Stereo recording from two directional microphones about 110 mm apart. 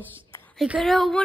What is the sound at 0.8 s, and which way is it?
Speech, centre (ahead or behind).